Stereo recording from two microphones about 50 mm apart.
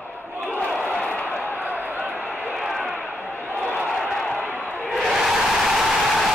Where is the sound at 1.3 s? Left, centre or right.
Left.